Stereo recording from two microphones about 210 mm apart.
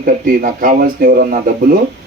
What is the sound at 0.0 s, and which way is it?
Speech, 40° right (ahead or behind).